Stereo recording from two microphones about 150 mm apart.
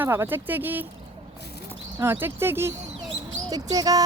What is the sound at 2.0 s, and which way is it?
Speech, 15° right (ahead or behind).